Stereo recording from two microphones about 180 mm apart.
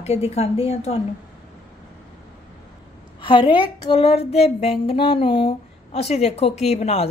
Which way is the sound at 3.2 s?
30° left (ahead or behind).